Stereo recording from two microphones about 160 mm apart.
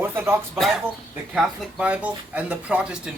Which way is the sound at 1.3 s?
Centre (ahead or behind).